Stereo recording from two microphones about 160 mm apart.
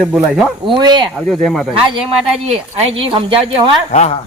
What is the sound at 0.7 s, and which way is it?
Speech, 30° right (ahead or behind).